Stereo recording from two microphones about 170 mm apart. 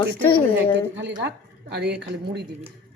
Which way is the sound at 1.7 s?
80° right.